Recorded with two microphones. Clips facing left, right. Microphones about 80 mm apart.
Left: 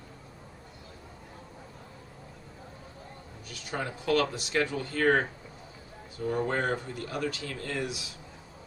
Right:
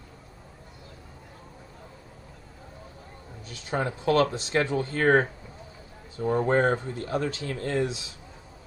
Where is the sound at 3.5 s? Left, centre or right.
Right.